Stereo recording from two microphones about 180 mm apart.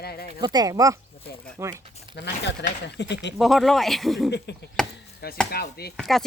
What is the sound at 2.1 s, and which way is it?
Speech, 70° left (ahead or behind).